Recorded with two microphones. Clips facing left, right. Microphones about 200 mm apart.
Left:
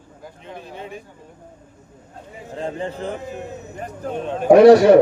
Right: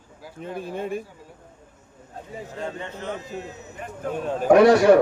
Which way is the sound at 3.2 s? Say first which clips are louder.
Left 3 dB; 55° left (ahead or behind).